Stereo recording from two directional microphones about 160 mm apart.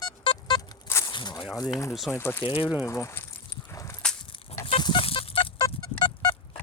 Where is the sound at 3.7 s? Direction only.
20° left (ahead or behind).